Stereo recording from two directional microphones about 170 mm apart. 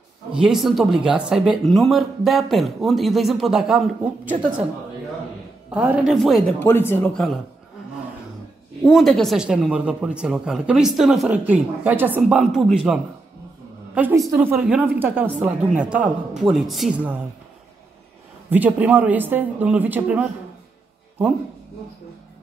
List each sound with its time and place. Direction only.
0.3 s speech: 5° right (ahead or behind)
5.7 s speech: 5° right (ahead or behind)
6.6 s speech: 15° left (ahead or behind)
8.8 s a woman's voice: centre (ahead or behind)
18.5 s a woman's voice: 10° right (ahead or behind)